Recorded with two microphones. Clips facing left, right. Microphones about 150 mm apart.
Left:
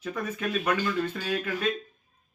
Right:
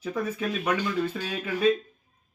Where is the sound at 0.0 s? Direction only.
10° right (ahead or behind).